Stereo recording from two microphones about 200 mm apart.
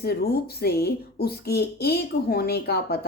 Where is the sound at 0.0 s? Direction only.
50° left (ahead or behind).